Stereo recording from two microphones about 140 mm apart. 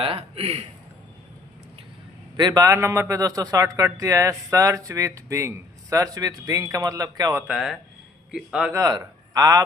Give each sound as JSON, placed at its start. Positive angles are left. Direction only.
{"t": 0.0, "sound": "speech", "side_deg": -40}
{"t": 2.3, "sound": "a man's voice", "side_deg": -30}
{"t": 7.4, "sound": "a man's voice", "side_deg": 0}
{"t": 8.7, "sound": "a man's voice", "side_deg": -25}